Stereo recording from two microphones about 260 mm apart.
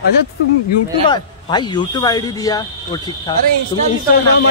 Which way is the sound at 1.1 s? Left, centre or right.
Centre.